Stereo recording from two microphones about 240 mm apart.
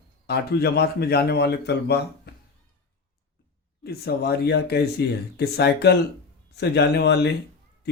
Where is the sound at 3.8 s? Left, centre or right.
Left.